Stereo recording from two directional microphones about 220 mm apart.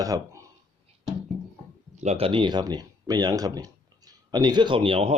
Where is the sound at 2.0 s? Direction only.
30° right (ahead or behind).